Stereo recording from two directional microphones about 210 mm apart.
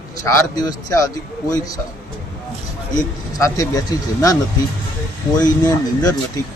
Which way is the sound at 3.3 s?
15° left (ahead or behind).